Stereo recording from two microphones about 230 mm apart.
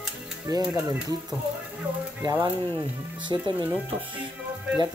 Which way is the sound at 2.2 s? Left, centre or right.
Centre.